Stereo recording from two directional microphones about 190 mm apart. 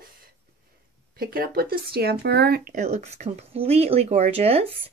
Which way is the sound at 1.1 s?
50° right (ahead or behind).